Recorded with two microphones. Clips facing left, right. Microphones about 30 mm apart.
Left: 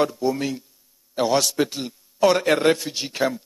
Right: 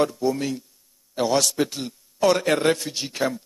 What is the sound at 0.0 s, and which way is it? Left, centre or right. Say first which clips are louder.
A man's voice: even; centre.